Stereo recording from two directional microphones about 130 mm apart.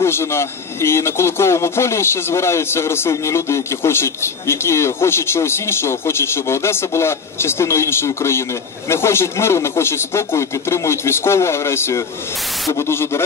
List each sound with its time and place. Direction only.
0.0 s a man's voice: 20° left (ahead or behind)